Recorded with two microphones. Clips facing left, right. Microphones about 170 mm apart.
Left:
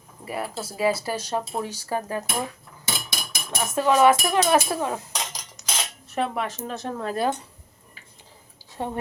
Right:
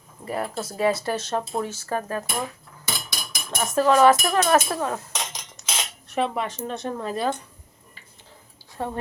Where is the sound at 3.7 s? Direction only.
5° left (ahead or behind).